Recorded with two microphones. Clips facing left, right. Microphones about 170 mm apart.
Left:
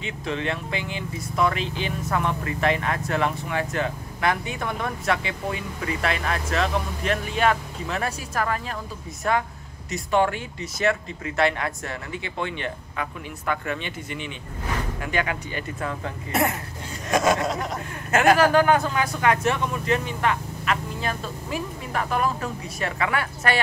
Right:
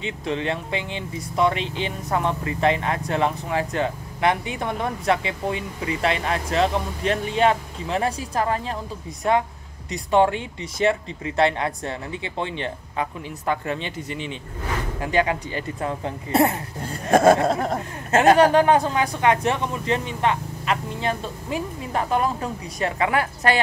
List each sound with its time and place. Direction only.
0.0 s speech: 30° right (ahead or behind)
9.8 s speech: 30° right (ahead or behind)
17.1 s chuckle: 55° right (ahead or behind)
18.1 s speech: 30° right (ahead or behind)